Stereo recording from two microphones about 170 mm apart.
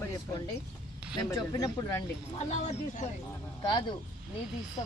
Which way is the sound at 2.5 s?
45° left (ahead or behind).